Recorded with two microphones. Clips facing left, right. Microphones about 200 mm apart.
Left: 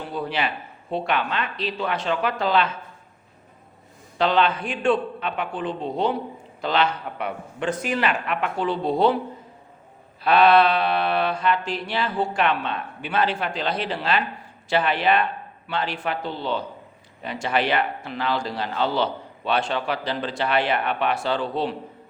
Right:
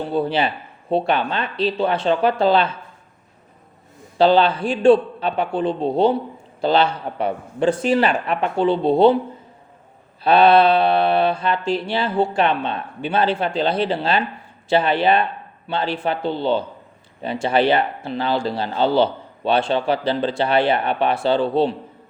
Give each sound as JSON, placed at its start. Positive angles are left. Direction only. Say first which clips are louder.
{"t": 0.0, "sound": "speech", "louder": "right 7 dB", "side_deg": -30}
{"t": 4.2, "sound": "speech", "louder": "right 6 dB", "side_deg": -30}
{"t": 10.2, "sound": "mantra", "louder": "right 3 dB", "side_deg": -30}
{"t": 14.7, "sound": "a man's voice", "louder": "right 4 dB", "side_deg": -30}
{"t": 16.4, "sound": "mantra", "louder": "right 7 dB", "side_deg": -30}